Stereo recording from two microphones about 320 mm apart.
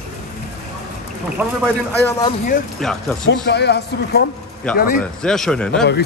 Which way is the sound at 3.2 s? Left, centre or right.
Left.